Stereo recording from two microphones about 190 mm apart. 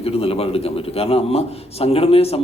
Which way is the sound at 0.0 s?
30° left (ahead or behind).